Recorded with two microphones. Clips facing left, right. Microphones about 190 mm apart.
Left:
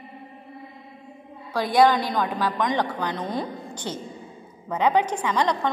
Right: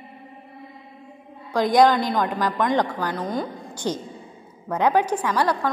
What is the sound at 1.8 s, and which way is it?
A woman's voice, 10° left (ahead or behind).